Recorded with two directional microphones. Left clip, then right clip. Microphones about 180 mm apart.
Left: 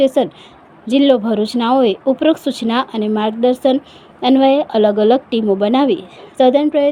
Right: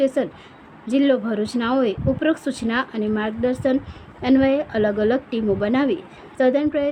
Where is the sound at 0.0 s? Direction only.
25° left (ahead or behind).